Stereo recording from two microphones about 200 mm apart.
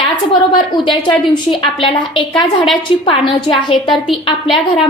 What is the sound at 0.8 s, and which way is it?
A woman's voice, 25° left (ahead or behind).